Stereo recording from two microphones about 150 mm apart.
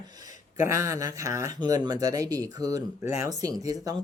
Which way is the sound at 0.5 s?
20° right (ahead or behind).